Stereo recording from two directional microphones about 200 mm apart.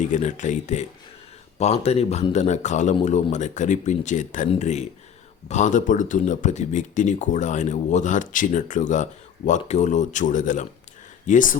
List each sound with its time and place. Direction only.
0.0 s speech: 40° left (ahead or behind)